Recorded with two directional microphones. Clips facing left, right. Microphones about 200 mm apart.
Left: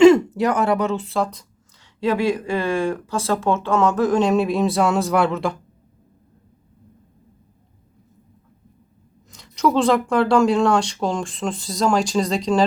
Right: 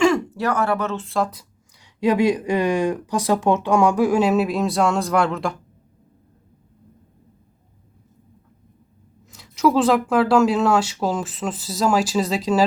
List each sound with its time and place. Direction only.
0.0 s speech: 20° left (ahead or behind)
1.0 s speech: centre (ahead or behind)
9.3 s speech: 5° right (ahead or behind)